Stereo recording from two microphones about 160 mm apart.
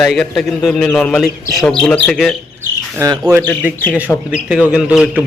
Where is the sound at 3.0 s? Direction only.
20° right (ahead or behind).